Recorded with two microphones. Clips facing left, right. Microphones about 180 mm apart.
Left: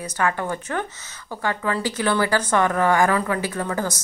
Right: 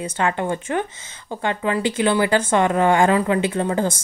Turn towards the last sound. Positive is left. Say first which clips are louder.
# right 5 dB
turn(degrees=-25)  # may be behind; listen again after turning